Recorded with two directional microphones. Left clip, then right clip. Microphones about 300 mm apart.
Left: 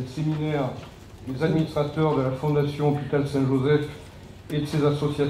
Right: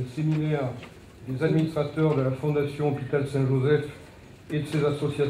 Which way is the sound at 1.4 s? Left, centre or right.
Left.